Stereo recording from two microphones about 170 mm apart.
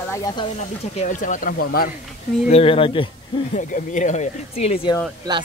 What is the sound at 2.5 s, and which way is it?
Speech, 35° left (ahead or behind).